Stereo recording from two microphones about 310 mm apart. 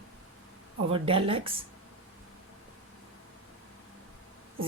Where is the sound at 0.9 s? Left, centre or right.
Centre.